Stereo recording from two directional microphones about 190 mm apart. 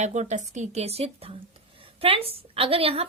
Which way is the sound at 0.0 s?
35° right (ahead or behind).